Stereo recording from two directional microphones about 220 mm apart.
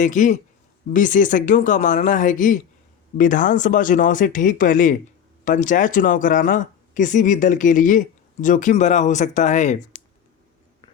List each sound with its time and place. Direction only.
0.0 s speech: 35° left (ahead or behind)